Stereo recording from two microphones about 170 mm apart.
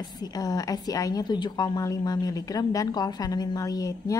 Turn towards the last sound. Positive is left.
turn(degrees=20)  # may be behind; listen again after turning